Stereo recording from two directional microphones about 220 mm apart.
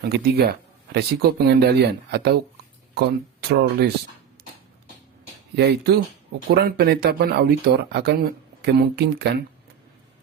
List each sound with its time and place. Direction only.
0.0 s speech: 45° right (ahead or behind)
3.5 s speech: 50° right (ahead or behind)
5.5 s speech: 45° right (ahead or behind)